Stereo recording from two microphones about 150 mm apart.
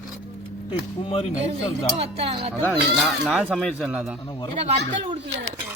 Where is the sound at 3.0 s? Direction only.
Centre (ahead or behind).